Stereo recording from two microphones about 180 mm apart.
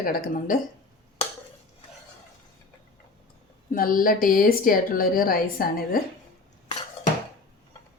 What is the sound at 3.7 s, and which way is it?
Speech, 50° left (ahead or behind).